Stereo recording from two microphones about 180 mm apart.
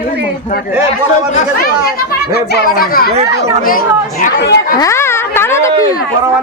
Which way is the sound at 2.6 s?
55° left (ahead or behind).